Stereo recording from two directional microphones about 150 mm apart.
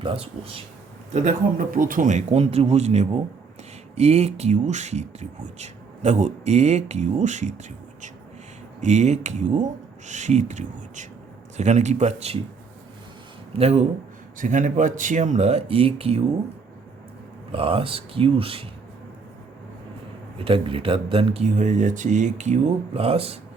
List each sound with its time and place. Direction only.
0.0 s speech: 35° right (ahead or behind)
1.1 s speech: 60° right (ahead or behind)
13.5 s speech: 45° right (ahead or behind)
14.3 s speech: 60° right (ahead or behind); by 16.2 s 40° right (ahead or behind)
17.5 s speech: 35° right (ahead or behind)
20.4 s speech: 35° right (ahead or behind)